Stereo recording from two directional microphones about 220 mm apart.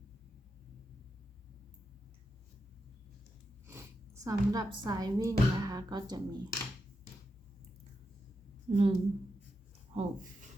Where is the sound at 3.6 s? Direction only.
10° right (ahead or behind).